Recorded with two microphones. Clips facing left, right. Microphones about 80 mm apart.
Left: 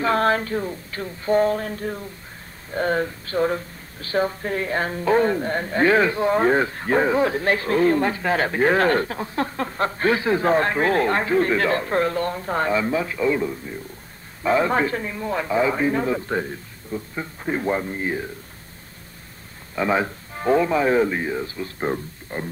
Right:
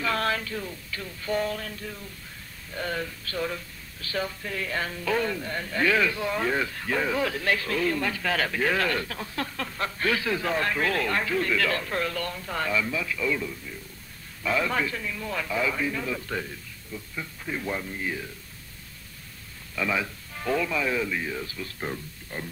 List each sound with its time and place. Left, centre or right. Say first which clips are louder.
0.0 s speech: left 8 dB; left
19.7 s speech: left 7 dB; left